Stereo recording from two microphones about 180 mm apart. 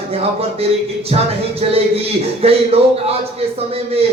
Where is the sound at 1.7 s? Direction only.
35° right (ahead or behind).